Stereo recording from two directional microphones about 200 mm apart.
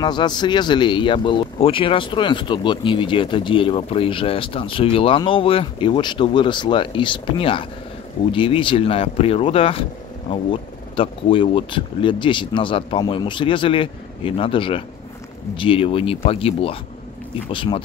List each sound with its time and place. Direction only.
0.0 s speech: 20° left (ahead or behind)